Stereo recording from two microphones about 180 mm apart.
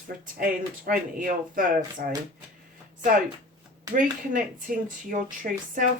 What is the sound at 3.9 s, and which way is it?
Speech, 50° right (ahead or behind).